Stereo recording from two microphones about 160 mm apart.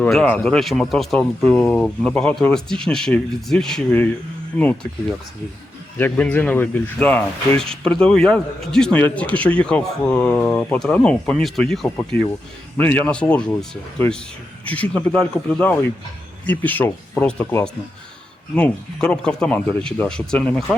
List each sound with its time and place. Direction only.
0.0 s speech: 5° left (ahead or behind)
6.0 s speech: 10° left (ahead or behind)